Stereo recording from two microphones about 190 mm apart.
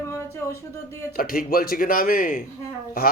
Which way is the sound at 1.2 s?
50° left (ahead or behind).